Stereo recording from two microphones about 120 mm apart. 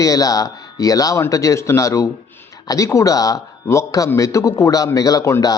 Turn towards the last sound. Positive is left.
turn(degrees=30)  # may be behind; listen again after turning